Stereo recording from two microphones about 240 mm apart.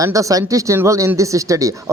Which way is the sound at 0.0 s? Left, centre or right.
Centre.